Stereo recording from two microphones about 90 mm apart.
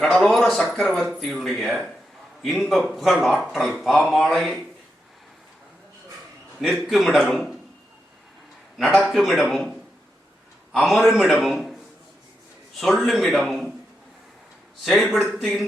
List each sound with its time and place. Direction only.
0.0 s a man's voice: centre (ahead or behind)
6.7 s a man's voice: 5° left (ahead or behind)
9.0 s a man's voice: centre (ahead or behind)
12.8 s a man's voice: centre (ahead or behind)
14.8 s a man's voice: centre (ahead or behind)